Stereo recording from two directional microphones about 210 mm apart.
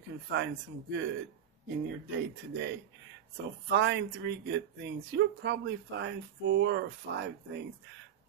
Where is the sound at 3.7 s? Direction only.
55° right (ahead or behind).